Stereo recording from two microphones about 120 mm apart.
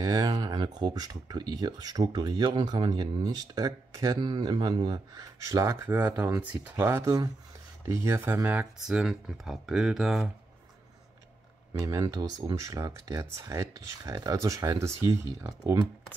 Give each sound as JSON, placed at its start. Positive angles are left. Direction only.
{"t": 0.0, "sound": "speech", "side_deg": -30}
{"t": 5.9, "sound": "speech", "side_deg": -15}
{"t": 8.7, "sound": "speech", "side_deg": -5}
{"t": 11.8, "sound": "speech", "side_deg": -30}